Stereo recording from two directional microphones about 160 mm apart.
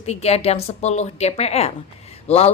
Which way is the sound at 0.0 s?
40° left (ahead or behind).